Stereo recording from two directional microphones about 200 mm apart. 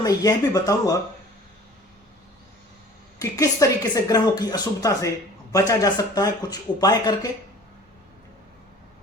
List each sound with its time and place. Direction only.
0.0 s speech: 15° left (ahead or behind)
3.2 s speech: 15° left (ahead or behind)